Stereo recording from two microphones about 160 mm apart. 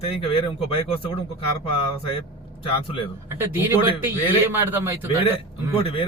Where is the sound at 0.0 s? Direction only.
35° left (ahead or behind).